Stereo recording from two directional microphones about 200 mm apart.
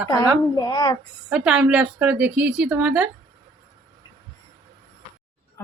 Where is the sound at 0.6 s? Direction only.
20° left (ahead or behind).